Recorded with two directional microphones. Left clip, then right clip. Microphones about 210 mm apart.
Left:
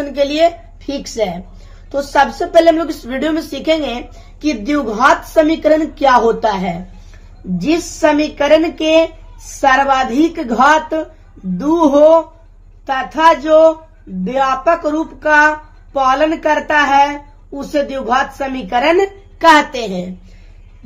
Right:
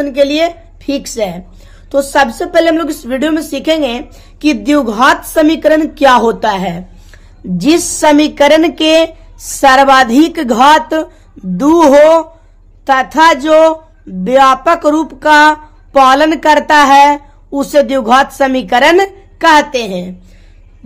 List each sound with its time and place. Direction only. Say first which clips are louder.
0.0 s a woman's voice: right 2 dB; 25° right (ahead or behind)
7.5 s speech: right 6 dB; 45° right (ahead or behind)
19.4 s speech: right 2 dB; 30° right (ahead or behind)